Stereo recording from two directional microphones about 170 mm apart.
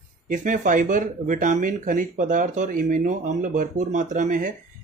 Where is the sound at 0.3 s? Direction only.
50° right (ahead or behind).